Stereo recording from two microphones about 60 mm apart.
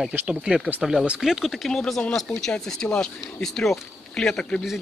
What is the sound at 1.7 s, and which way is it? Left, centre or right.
Speech, centre.